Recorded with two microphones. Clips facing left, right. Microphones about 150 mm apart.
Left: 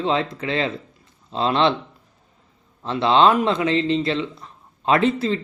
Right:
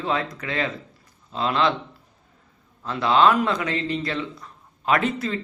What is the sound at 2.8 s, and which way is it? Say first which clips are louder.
Speech: left 2 dB; 25° left (ahead or behind).